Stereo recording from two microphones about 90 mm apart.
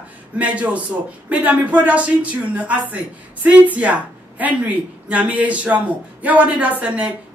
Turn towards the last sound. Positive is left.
turn(degrees=-15)  # may be behind; listen again after turning